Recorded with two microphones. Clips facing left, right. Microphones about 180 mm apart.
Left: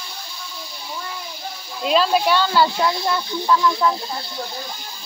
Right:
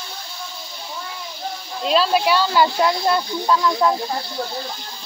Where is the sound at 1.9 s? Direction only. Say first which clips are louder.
Even; centre (ahead or behind).